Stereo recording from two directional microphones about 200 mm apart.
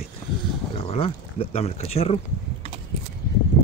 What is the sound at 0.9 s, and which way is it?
Speech, 30° left (ahead or behind).